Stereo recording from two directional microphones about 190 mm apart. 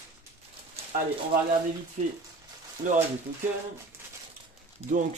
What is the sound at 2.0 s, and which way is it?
Mechanisms, 40° right (ahead or behind).